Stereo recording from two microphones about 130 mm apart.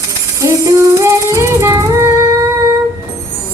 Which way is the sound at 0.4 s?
25° right (ahead or behind).